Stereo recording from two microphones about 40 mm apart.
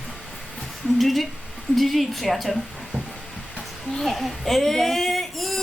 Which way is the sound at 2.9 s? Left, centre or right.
Left.